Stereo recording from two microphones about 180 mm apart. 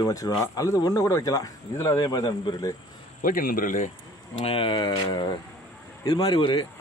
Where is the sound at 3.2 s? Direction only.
50° left (ahead or behind).